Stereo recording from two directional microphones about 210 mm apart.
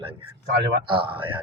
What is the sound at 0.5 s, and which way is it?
Speech, 55° right (ahead or behind).